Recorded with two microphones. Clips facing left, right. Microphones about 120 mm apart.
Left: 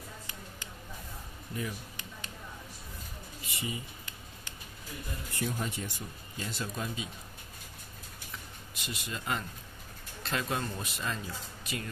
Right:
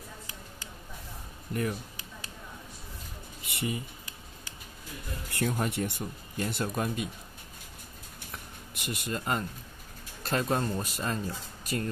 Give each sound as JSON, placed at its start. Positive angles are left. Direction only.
{"t": 1.5, "sound": "speech", "side_deg": -60}
{"t": 3.4, "sound": "speech", "side_deg": -65}
{"t": 5.3, "sound": "speech", "side_deg": -65}
{"t": 8.7, "sound": "speech", "side_deg": -55}